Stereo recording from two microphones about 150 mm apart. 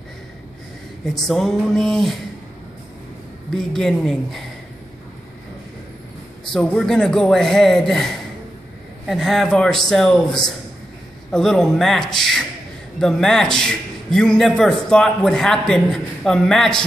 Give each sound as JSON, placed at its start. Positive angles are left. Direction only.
{"t": 1.2, "sound": "a man's voice", "side_deg": 0}
{"t": 3.5, "sound": "a man's voice", "side_deg": 5}
{"t": 6.5, "sound": "a man's voice", "side_deg": 5}